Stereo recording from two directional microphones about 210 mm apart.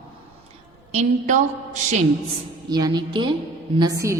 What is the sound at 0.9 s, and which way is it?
A woman's voice, 35° right (ahead or behind).